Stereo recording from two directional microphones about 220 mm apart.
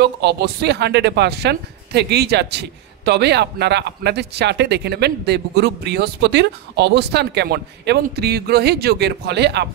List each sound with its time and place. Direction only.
0.0 s a woman's voice: 50° right (ahead or behind)